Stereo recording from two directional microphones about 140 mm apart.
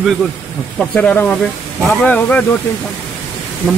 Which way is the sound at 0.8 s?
10° left (ahead or behind).